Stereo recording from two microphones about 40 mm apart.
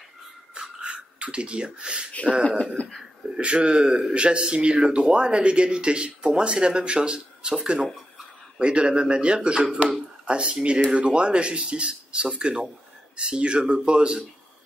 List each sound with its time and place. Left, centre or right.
0.6 s a sound: right
2.8 s speech: left
3.3 s speech: right